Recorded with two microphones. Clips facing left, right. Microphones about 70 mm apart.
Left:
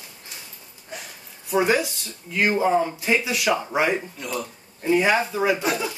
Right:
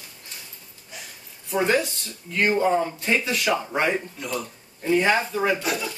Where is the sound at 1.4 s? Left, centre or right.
Centre.